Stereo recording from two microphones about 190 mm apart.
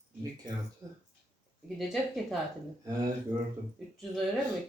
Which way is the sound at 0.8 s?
15° right (ahead or behind).